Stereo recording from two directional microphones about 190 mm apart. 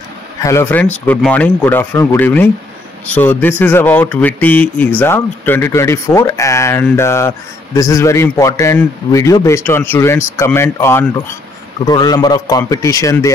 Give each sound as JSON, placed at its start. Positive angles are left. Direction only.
{"t": 0.4, "sound": "a man's voice", "side_deg": 15}